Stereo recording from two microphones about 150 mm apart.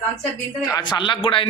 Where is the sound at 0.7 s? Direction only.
30° left (ahead or behind).